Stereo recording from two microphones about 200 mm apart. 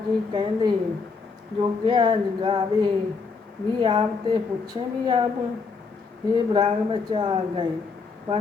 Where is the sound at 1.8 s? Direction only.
25° right (ahead or behind).